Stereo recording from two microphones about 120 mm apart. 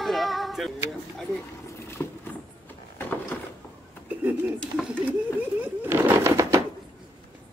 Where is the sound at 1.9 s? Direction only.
20° left (ahead or behind).